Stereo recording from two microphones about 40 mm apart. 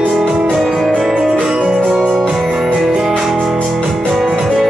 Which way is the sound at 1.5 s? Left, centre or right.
Right.